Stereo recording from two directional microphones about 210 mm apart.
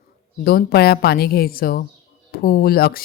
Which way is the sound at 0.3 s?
45° left (ahead or behind).